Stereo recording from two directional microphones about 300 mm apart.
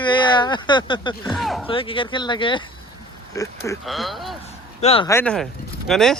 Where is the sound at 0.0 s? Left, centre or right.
Centre.